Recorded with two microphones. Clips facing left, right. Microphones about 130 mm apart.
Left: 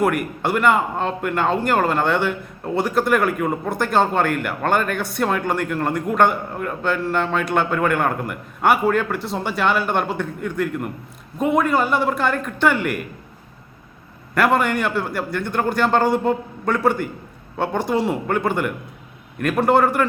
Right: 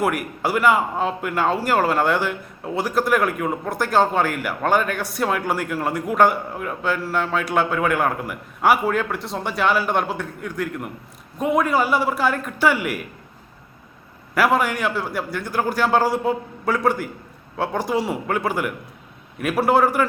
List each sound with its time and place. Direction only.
0.0 s speech: 5° right (ahead or behind)
14.3 s speech: 5° right (ahead or behind)